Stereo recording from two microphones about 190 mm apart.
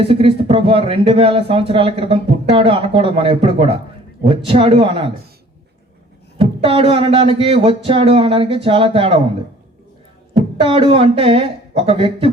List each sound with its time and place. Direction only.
0.0 s speech: 30° right (ahead or behind)
6.4 s speech: 30° right (ahead or behind)
10.3 s speech: 30° right (ahead or behind)